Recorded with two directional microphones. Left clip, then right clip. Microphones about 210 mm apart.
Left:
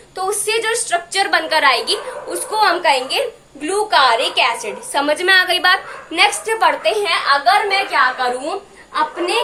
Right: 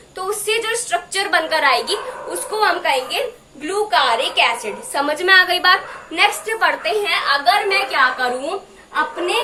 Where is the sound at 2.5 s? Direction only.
20° left (ahead or behind).